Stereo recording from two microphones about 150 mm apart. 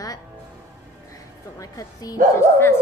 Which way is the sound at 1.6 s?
25° left (ahead or behind).